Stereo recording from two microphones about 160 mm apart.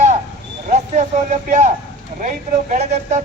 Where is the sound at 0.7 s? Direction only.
45° right (ahead or behind).